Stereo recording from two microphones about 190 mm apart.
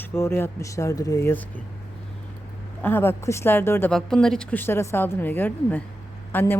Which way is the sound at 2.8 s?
10° left (ahead or behind).